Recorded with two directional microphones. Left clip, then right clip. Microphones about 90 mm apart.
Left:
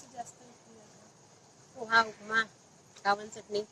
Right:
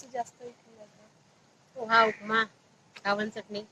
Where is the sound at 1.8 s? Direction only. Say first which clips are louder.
Right 4 dB; 35° right (ahead or behind).